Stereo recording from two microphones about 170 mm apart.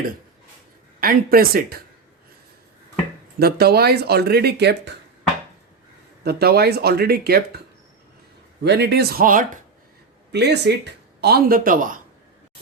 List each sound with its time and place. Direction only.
0.9 s speech: 60° right (ahead or behind)
3.3 s speech: 65° right (ahead or behind); by 4.9 s 85° right
6.2 s speech: 70° right (ahead or behind)
8.6 s speech: 80° right; by 9.6 s 50° right (ahead or behind)
10.3 s speech: 80° right; by 11.9 s 55° right (ahead or behind)